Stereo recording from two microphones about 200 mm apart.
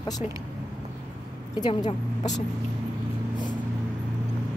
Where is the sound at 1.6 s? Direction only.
25° left (ahead or behind).